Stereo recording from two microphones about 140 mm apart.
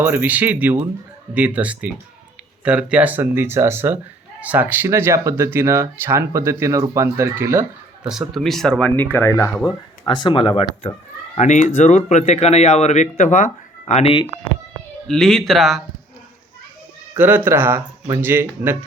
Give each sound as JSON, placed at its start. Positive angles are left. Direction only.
{"t": 0.0, "sound": "speech", "side_deg": -10}
{"t": 8.0, "sound": "speech", "side_deg": -5}
{"t": 9.0, "sound": "speech", "side_deg": 15}
{"t": 10.0, "sound": "speech", "side_deg": 35}
{"t": 11.3, "sound": "speech", "side_deg": 60}
{"t": 15.0, "sound": "speech", "side_deg": 5}
{"t": 17.2, "sound": "speech", "side_deg": -15}